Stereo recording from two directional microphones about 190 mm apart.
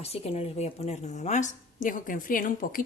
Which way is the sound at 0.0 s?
35° left (ahead or behind).